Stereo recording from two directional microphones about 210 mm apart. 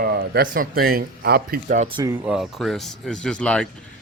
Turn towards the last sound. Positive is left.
turn(degrees=5)  # may be behind; listen again after turning